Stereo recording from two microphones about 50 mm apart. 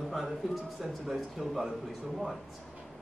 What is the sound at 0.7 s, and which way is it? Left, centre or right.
Speech, centre.